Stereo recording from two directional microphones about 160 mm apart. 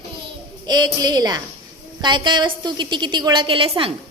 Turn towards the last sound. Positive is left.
turn(degrees=-35)  # may be behind; listen again after turning